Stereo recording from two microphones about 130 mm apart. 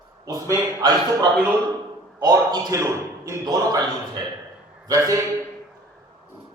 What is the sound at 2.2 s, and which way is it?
A man's voice, 30° right (ahead or behind).